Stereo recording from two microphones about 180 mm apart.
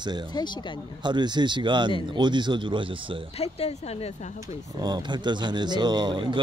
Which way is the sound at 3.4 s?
35° left (ahead or behind).